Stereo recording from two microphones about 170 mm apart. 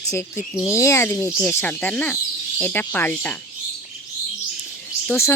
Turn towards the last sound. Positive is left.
turn(degrees=15)  # may be behind; listen again after turning